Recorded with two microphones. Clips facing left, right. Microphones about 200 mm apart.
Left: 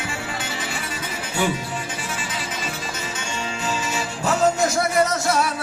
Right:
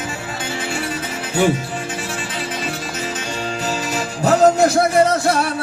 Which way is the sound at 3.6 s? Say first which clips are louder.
Right 2 dB; 40° right (ahead or behind).